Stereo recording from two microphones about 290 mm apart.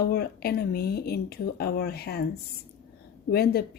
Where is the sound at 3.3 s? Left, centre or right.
Left.